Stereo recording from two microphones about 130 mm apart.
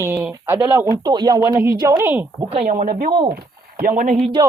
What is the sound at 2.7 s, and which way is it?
Speech, 90° right.